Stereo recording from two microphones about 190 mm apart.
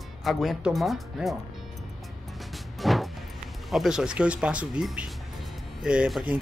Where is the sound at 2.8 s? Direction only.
Centre (ahead or behind).